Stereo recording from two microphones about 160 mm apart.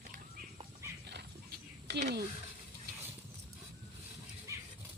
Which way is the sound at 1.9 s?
90° right.